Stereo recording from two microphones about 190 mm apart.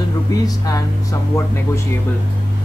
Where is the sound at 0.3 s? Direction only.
20° left (ahead or behind).